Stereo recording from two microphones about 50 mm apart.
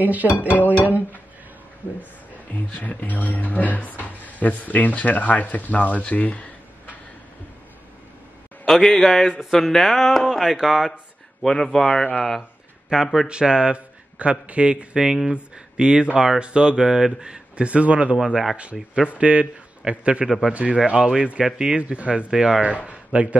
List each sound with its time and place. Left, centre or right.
0.0 s music: right
2.5 s speech: left
8.6 s speech: centre
11.4 s speech: centre
12.0 s speech: left
12.9 s speech: centre
13.3 s speech: centre
15.0 s speech: centre
15.3 s speech: centre
18.1 s speech: centre
19.0 s a man's voice: right
21.8 s speech: right
22.3 s speech: centre
22.8 s a sound: right